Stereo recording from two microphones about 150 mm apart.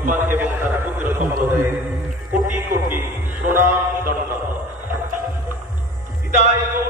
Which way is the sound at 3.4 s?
15° right (ahead or behind).